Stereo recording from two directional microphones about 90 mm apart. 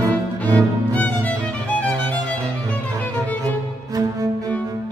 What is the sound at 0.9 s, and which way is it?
Music, 15° left (ahead or behind).